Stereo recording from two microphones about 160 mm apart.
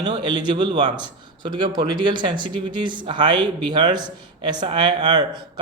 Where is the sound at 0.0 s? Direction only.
25° right (ahead or behind).